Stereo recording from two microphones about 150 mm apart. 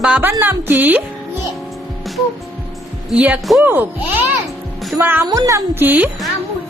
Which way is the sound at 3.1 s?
10° right (ahead or behind).